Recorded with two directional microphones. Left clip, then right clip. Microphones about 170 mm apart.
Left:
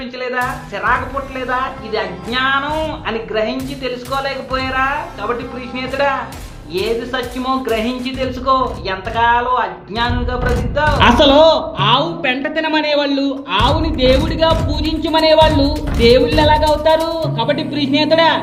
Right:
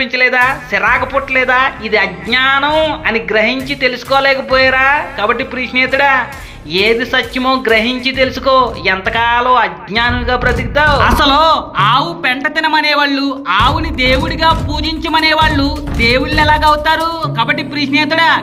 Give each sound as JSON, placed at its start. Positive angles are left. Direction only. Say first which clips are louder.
{"t": 0.0, "sound": "speech", "louder": "right 9 dB", "side_deg": -15}
{"t": 11.0, "sound": "speech", "louder": "left 1 dB", "side_deg": -25}
{"t": 13.6, "sound": "speech", "louder": "right 3 dB", "side_deg": -90}
{"t": 14.0, "sound": "speech", "louder": "right 2 dB", "side_deg": -20}